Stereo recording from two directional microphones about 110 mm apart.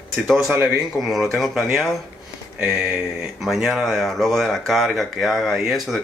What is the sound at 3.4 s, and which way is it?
Speech, centre (ahead or behind).